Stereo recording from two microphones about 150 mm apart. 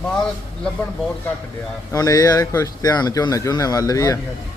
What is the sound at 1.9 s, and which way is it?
Speech, 25° left (ahead or behind).